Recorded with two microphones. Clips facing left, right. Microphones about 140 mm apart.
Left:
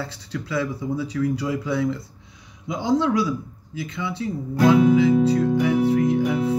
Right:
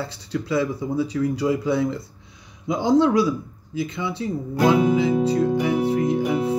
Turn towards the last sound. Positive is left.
turn(degrees=-15)  # may be behind; listen again after turning